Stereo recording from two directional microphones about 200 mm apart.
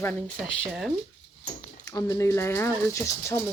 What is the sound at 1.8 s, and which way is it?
Speech, 15° left (ahead or behind).